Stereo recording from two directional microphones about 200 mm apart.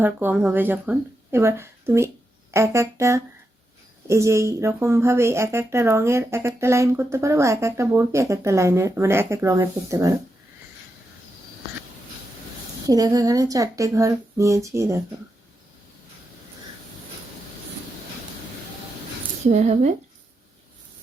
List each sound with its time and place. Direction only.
0.0 s a woman's voice: 10° right (ahead or behind)
12.9 s a woman's voice: 20° right (ahead or behind)
19.5 s speech: 35° right (ahead or behind)